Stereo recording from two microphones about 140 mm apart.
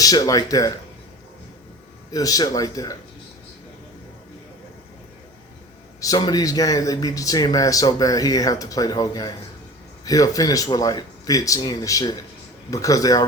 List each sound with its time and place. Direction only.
0.0 s speech: 25° left (ahead or behind)
2.1 s speech: 25° left (ahead or behind)
6.0 s speech: 30° left (ahead or behind)